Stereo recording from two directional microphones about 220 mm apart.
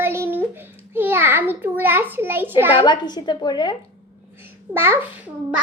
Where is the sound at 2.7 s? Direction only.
20° left (ahead or behind).